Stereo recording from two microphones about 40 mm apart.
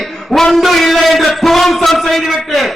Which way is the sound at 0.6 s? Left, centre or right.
Centre.